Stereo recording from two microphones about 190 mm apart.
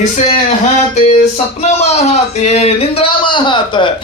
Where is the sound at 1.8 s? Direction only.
35° left (ahead or behind).